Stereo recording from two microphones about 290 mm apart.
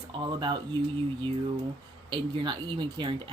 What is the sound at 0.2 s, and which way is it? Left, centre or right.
Speech, centre.